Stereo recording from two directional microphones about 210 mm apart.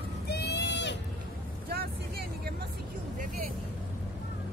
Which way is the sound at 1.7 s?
45° right (ahead or behind).